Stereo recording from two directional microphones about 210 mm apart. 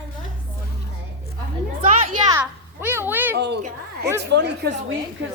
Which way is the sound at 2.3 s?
10° right (ahead or behind).